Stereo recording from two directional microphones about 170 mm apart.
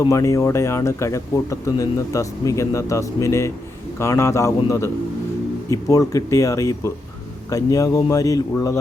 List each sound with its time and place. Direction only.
0.0 s speech: 20° left (ahead or behind)